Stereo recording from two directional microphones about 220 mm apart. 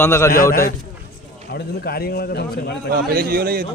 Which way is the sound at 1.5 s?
45° left (ahead or behind).